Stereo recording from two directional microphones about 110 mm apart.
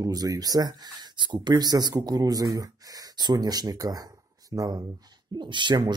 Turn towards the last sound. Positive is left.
turn(degrees=-45)  # may be behind; listen again after turning